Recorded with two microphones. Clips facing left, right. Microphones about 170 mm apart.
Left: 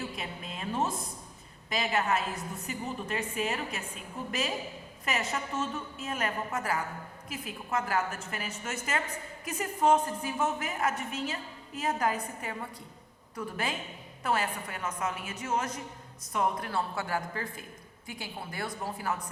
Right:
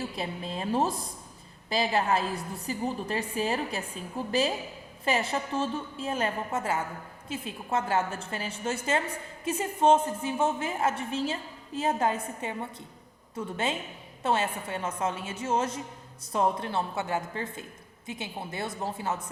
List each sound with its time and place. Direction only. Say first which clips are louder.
0.2 s a woman's voice: right 6 dB; 30° right (ahead or behind)